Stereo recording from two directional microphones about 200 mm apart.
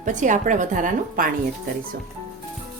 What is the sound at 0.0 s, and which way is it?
A woman's voice, 40° right (ahead or behind).